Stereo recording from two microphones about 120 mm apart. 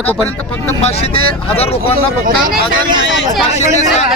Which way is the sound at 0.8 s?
55° left (ahead or behind).